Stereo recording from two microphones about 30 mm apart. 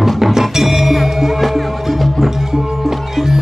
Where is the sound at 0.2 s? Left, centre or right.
Centre.